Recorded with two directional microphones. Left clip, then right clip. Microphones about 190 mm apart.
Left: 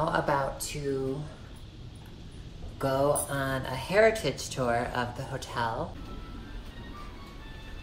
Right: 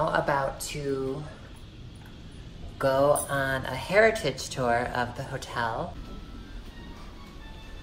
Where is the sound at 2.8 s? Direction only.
20° right (ahead or behind).